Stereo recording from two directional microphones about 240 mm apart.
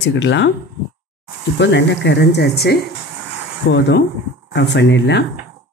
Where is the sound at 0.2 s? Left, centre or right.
Left.